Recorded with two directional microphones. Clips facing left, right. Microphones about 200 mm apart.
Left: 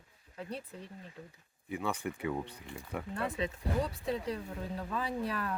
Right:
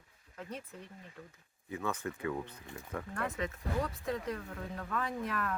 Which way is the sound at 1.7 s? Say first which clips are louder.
Left 2 dB; 15° left (ahead or behind).